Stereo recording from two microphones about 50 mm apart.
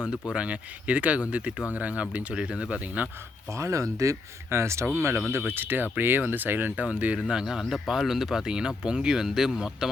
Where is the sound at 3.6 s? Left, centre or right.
Right.